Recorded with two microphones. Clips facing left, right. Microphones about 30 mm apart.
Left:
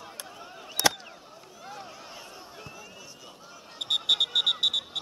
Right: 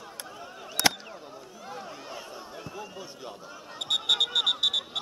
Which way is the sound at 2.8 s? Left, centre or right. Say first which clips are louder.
Right 6 dB; right.